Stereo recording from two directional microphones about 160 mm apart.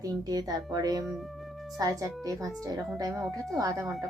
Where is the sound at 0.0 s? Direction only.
20° right (ahead or behind).